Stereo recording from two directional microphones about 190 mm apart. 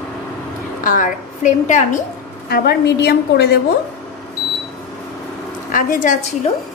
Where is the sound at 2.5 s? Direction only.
60° left (ahead or behind).